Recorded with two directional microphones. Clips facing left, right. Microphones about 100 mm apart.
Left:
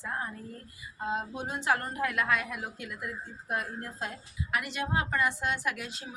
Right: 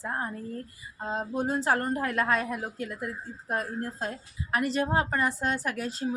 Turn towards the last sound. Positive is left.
turn(degrees=-40)  # may be behind; listen again after turning